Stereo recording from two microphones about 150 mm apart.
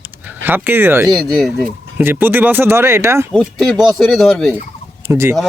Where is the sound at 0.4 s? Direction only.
15° right (ahead or behind).